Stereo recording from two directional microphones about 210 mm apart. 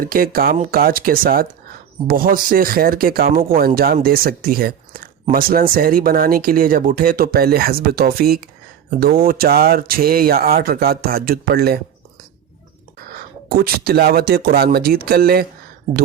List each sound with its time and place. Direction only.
0.0 s speech: 45° right (ahead or behind)
13.5 s speech: 45° right (ahead or behind)